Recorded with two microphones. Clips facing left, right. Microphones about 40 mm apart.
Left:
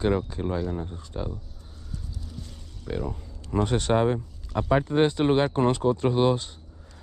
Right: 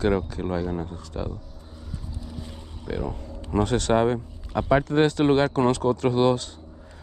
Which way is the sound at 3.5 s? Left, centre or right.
Right.